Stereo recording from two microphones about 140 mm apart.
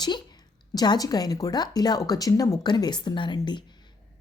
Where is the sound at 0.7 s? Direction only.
30° left (ahead or behind).